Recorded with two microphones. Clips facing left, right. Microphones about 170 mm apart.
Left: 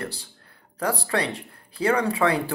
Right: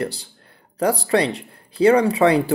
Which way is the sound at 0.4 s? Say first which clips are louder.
Right 8 dB; 20° right (ahead or behind).